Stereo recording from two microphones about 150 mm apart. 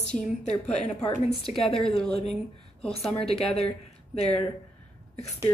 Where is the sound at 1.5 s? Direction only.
50° left (ahead or behind).